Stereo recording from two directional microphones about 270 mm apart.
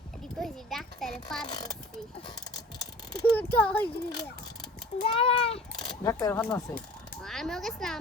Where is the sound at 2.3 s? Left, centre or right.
Centre.